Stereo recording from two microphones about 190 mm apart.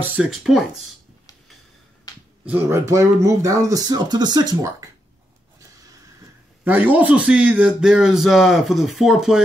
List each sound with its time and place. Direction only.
0.0 s speech: 5° right (ahead or behind)
2.1 s finger snapping: 20° left (ahead or behind)
2.4 s speech: 10° right (ahead or behind)
6.6 s speech: 10° right (ahead or behind)